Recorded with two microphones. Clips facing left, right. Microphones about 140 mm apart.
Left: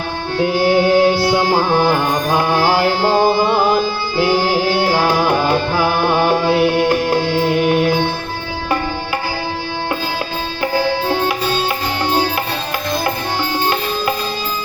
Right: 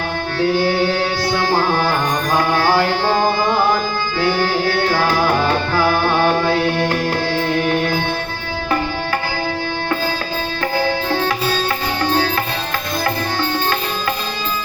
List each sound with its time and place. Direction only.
0.4 s music: 15° left (ahead or behind)